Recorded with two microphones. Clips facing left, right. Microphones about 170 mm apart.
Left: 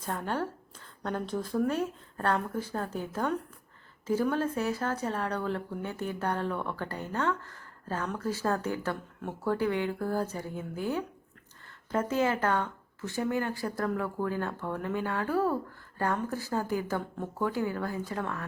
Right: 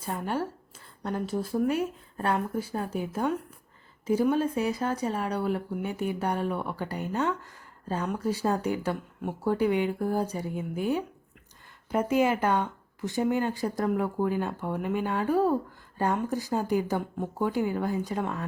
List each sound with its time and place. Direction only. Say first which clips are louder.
0.0 s speech: right 2 dB; 10° right (ahead or behind)